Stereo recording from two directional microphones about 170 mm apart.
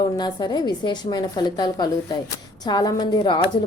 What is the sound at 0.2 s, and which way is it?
A woman's voice, 25° left (ahead or behind).